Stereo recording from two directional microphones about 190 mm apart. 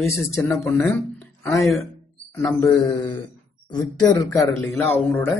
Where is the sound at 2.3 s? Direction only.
15° left (ahead or behind).